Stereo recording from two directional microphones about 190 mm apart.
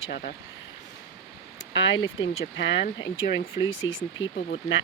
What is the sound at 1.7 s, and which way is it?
Speech, 70° left (ahead or behind).